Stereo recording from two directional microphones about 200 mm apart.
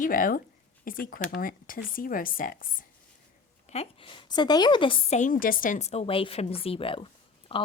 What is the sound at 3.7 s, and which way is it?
A woman's voice, 25° left (ahead or behind).